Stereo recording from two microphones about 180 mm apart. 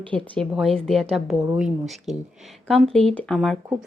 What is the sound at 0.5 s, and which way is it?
A woman's voice, centre (ahead or behind).